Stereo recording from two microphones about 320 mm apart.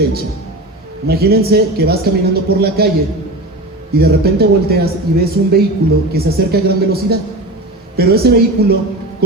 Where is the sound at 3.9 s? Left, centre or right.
Right.